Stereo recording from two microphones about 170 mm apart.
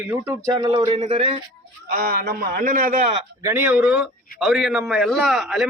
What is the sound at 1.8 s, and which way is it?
A man's voice, 60° right (ahead or behind).